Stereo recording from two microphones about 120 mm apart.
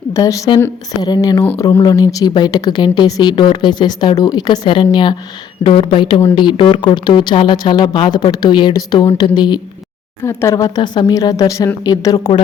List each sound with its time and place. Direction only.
0.1 s a woman's voice: 25° left (ahead or behind)
10.2 s speech: 25° left (ahead or behind)